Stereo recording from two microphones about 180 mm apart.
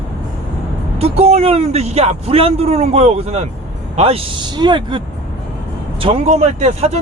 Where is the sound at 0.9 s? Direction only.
35° right (ahead or behind).